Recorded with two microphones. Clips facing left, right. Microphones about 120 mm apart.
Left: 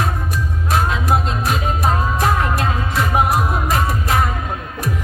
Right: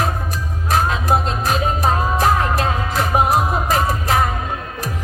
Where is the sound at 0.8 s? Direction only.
35° right (ahead or behind).